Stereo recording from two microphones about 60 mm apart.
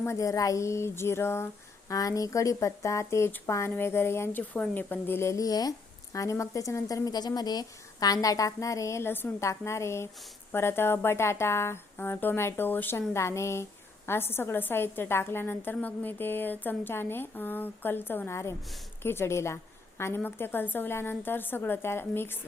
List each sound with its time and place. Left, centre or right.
0.2 s speech: left
1.9 s speech: left
4.3 s speech: left
5.3 s speech: left
6.1 s speech: left
9.4 s speech: left
13.1 s speech: left
15.7 s speech: left
18.3 s speech: left
19.0 s speech: left